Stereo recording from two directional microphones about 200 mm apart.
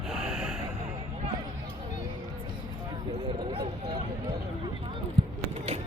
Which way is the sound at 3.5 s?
25° right (ahead or behind).